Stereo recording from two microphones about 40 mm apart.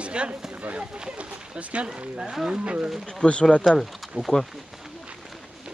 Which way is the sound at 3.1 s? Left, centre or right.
Left.